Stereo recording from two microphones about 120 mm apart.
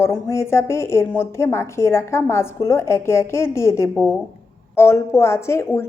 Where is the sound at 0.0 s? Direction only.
20° left (ahead or behind).